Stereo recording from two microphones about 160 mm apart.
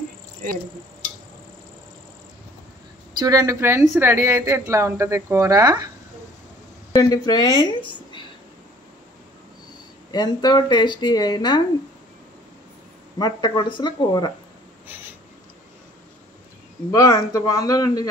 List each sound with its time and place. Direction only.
3.2 s speech: 20° right (ahead or behind)
6.9 s a woman's voice: 25° left (ahead or behind)
10.1 s speech: 25° left (ahead or behind)
13.2 s speech: 30° left (ahead or behind)
16.9 s speech: 20° left (ahead or behind)